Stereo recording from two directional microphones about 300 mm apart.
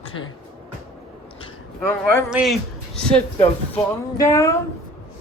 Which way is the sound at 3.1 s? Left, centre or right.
Centre.